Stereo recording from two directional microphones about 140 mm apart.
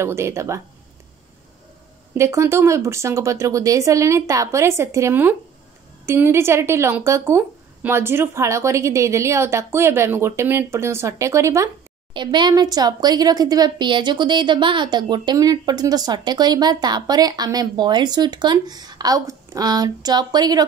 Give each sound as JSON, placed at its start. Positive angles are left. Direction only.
{"t": 0.0, "sound": "speech", "side_deg": -20}
{"t": 2.1, "sound": "speech", "side_deg": -20}
{"t": 12.1, "sound": "speech", "side_deg": -35}